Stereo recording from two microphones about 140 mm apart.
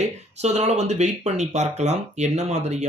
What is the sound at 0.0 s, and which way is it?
Speech, 50° right (ahead or behind).